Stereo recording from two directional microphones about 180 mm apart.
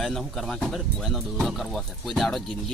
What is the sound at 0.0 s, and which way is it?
Speech, centre (ahead or behind).